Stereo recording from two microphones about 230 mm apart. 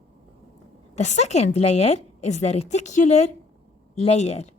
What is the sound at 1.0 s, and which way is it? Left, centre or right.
A woman's voice, left.